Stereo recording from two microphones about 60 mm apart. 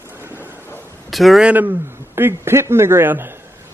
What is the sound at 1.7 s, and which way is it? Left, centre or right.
A man's voice, right.